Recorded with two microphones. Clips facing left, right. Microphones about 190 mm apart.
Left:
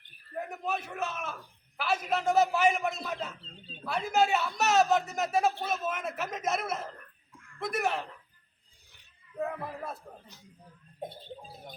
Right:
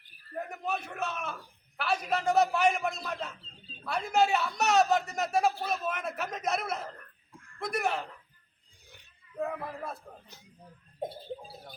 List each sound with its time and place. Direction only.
0.3 s a man's voice: centre (ahead or behind)
9.4 s speech: 5° left (ahead or behind)